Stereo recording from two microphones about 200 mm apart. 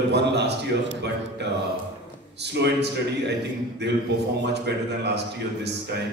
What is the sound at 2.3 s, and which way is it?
Speech, 55° right (ahead or behind).